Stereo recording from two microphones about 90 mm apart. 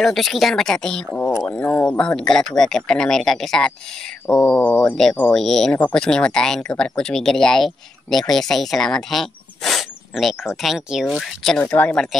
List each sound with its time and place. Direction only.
0.0 s speech: centre (ahead or behind)
1.4 s speech: 20° left (ahead or behind)
2.0 s speech: 10° left (ahead or behind)
5.3 s speech: 5° left (ahead or behind)
11.5 s speech: 15° left (ahead or behind)